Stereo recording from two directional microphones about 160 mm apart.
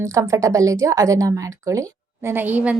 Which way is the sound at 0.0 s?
20° right (ahead or behind).